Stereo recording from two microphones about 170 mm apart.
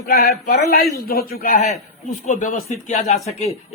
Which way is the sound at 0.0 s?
60° left (ahead or behind).